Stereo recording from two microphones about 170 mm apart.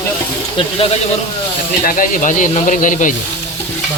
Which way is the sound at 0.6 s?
30° left (ahead or behind).